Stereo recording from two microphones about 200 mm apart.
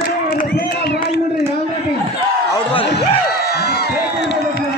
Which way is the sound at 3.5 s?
50° left (ahead or behind).